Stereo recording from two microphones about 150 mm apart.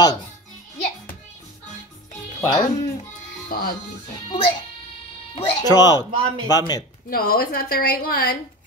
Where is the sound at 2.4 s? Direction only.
25° left (ahead or behind).